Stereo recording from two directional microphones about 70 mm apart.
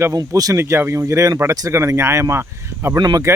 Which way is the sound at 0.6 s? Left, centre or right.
Right.